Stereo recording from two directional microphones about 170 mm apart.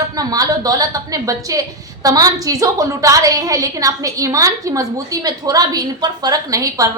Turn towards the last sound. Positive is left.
turn(degrees=-20)  # may be behind; listen again after turning